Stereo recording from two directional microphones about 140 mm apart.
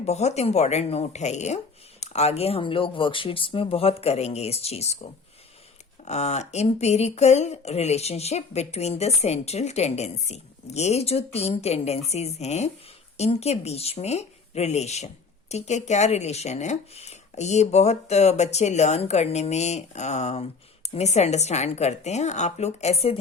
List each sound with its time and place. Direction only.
0.0 s speech: 50° left (ahead or behind)
6.1 s speech: 50° left (ahead or behind)